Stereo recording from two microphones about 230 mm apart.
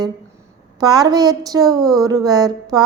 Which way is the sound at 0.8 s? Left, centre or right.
Centre.